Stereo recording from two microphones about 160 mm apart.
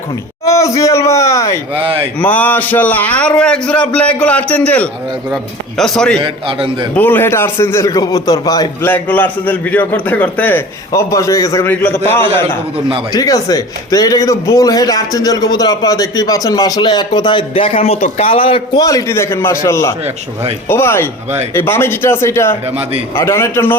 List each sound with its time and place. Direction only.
0.4 s a man's voice: 20° left (ahead or behind); by 6.1 s 5° left (ahead or behind)
6.1 s a man's voice: 35° right (ahead or behind)
6.9 s a man's voice: 10° left (ahead or behind)
8.9 s a man's voice: 10° left (ahead or behind); by 18.8 s 35° left (ahead or behind)
18.8 s a man's voice: 20° left (ahead or behind)